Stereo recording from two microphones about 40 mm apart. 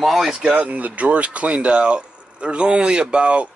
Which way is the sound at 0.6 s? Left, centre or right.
Right.